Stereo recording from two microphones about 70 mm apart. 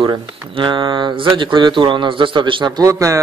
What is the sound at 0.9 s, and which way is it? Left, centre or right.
A man's voice, right.